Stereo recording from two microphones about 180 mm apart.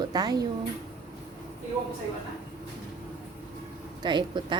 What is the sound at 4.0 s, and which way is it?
Speech, 25° right (ahead or behind).